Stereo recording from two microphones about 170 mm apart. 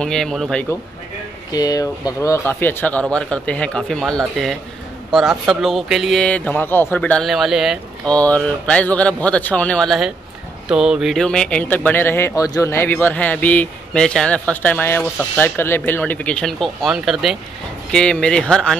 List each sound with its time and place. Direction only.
0.0 s speech: 5° left (ahead or behind)
1.5 s speech: 20° left (ahead or behind); by 18.8 s 5° left (ahead or behind)